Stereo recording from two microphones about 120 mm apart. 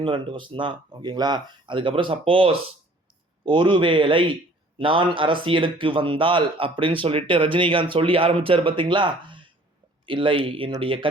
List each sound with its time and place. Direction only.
0.0 s speech: 45° right (ahead or behind)